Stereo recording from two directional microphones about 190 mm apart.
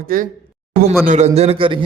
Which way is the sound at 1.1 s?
35° right (ahead or behind).